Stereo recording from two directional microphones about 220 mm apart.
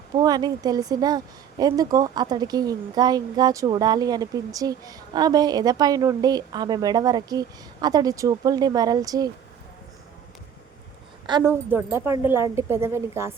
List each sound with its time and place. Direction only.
0.2 s a woman's voice: 15° right (ahead or behind)
11.3 s a woman's voice: 20° right (ahead or behind)